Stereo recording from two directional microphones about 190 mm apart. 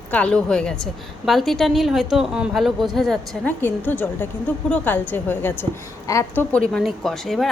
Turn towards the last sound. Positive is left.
turn(degrees=0)  # may be behind; listen again after turning